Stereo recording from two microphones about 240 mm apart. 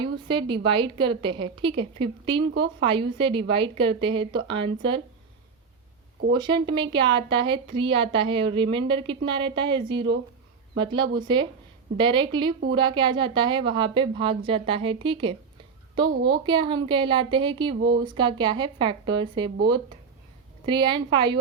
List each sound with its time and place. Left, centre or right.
0.0 s speech: right
6.3 s speech: centre
20.7 s speech: centre